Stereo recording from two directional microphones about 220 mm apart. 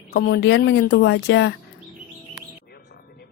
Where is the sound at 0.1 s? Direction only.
50° left (ahead or behind).